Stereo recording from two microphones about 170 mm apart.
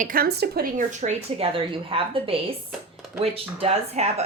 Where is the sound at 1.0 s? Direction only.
35° right (ahead or behind).